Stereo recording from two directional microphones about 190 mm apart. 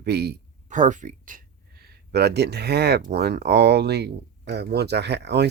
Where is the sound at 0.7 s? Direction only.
40° right (ahead or behind); by 5.5 s 60° right (ahead or behind).